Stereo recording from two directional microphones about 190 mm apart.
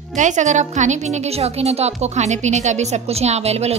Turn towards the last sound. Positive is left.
turn(degrees=-35)  # may be behind; listen again after turning